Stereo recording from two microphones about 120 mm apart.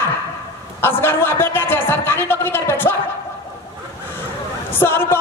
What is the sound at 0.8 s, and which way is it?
Speech, 20° left (ahead or behind).